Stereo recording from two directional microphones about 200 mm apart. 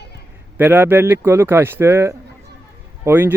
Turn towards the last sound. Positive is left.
turn(degrees=-10)  # may be behind; listen again after turning